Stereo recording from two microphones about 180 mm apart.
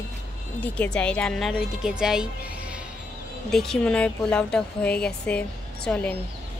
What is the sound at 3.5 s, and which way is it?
Speech, centre (ahead or behind).